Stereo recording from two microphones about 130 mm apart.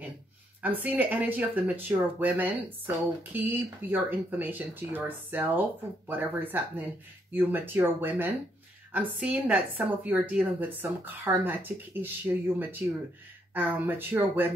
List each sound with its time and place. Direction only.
0.6 s a woman's voice: 10° right (ahead or behind)